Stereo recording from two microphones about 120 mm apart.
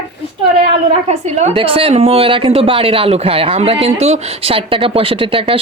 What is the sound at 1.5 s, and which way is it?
Speech, 50° right (ahead or behind).